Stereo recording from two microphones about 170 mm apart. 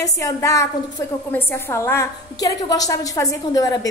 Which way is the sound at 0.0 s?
20° left (ahead or behind).